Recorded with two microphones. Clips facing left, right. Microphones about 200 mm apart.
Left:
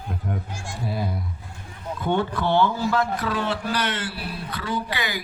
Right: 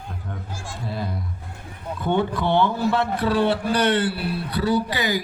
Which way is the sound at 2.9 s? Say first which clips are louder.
Right 3 dB; 30° right (ahead or behind).